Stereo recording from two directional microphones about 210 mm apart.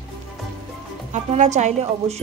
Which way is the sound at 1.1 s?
35° right (ahead or behind).